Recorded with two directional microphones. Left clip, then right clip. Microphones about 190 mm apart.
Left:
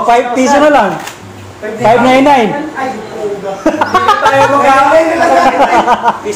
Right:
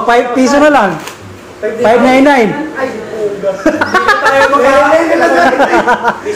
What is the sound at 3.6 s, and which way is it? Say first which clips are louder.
Music: left 1 dB; 10° right (ahead or behind).